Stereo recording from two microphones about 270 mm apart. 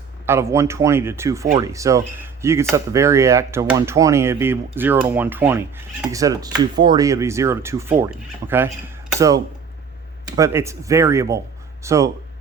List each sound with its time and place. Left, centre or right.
0.3 s speech: centre